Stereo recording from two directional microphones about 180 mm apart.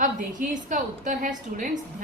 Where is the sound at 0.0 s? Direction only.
45° right (ahead or behind).